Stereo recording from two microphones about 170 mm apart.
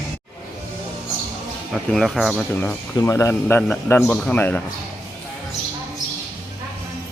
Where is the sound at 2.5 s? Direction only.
10° left (ahead or behind).